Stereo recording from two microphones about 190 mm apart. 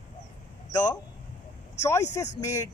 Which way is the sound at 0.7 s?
20° left (ahead or behind).